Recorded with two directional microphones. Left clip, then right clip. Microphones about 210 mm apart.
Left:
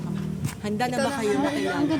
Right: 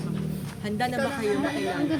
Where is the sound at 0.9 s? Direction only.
45° left (ahead or behind).